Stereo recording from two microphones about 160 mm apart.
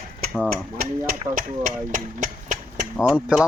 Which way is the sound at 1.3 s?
55° right (ahead or behind).